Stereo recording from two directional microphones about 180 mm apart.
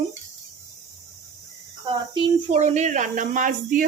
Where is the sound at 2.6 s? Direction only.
40° right (ahead or behind).